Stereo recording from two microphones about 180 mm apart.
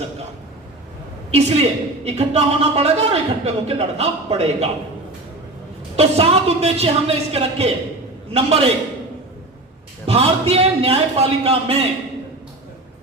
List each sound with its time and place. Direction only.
1.3 s a man's voice: 35° right (ahead or behind)
6.0 s a man's voice: 35° right (ahead or behind)
10.1 s a man's voice: 35° right (ahead or behind)